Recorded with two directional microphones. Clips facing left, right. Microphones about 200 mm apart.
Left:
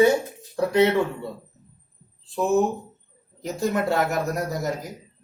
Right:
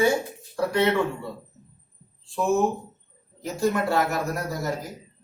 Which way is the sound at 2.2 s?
20° left (ahead or behind).